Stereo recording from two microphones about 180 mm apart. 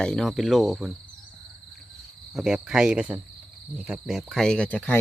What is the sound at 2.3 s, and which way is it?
Cricket, 5° right (ahead or behind).